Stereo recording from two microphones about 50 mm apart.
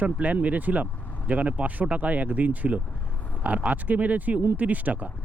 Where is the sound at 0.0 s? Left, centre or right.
Right.